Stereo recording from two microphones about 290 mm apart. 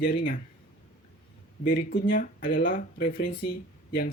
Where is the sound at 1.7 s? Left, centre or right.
Left.